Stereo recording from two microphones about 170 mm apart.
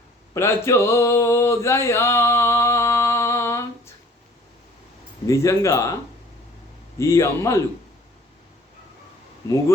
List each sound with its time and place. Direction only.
0.3 s a sound: 15° left (ahead or behind)
5.2 s speech: 15° left (ahead or behind)
7.0 s speech: 15° left (ahead or behind)